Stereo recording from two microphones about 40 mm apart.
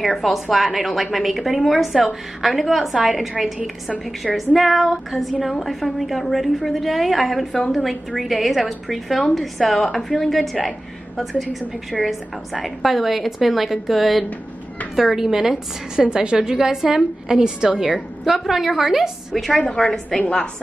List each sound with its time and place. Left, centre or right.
0.0 s a woman's voice: centre
11.9 s a woman's voice: centre
16.0 s a woman's voice: centre
18.2 s a woman's voice: centre
19.5 s a woman's voice: left